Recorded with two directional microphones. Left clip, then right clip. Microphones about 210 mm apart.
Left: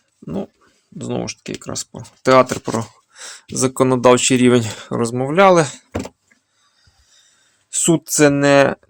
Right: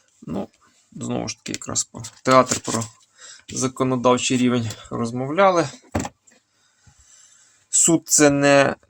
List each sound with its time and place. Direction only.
0.3 s speech: 20° left (ahead or behind)
3.2 s speech: 35° left (ahead or behind)
7.7 s speech: 20° left (ahead or behind)